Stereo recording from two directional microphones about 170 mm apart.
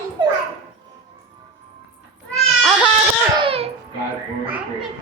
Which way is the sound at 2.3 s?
Centre (ahead or behind).